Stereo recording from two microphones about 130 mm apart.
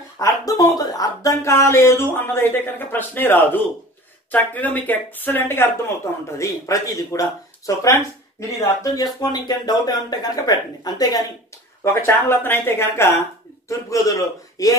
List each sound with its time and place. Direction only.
0.2 s speech: 30° left (ahead or behind)
11.8 s speech: 20° left (ahead or behind)